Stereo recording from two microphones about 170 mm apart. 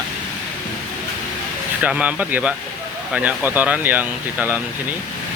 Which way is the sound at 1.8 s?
5° right (ahead or behind).